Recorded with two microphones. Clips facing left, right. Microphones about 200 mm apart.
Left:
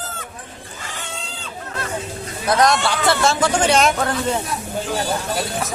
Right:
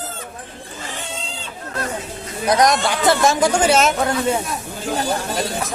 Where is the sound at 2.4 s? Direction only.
15° right (ahead or behind).